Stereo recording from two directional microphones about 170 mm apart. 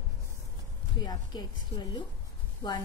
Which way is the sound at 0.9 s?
25° left (ahead or behind).